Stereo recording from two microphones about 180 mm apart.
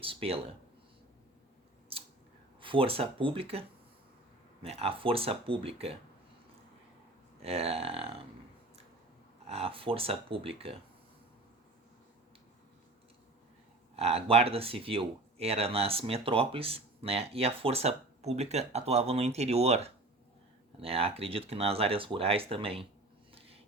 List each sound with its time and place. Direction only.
0.0 s speech: 30° right (ahead or behind)
1.9 s scissors: 30° right (ahead or behind)
2.6 s speech: 30° right (ahead or behind)
4.6 s speech: 35° right (ahead or behind)
7.4 s speech: 35° right (ahead or behind)
9.5 s speech: 30° right (ahead or behind)
13.9 s speech: 35° right (ahead or behind)